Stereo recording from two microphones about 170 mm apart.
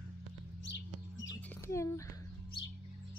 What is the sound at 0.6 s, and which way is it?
Chirp, 90° left.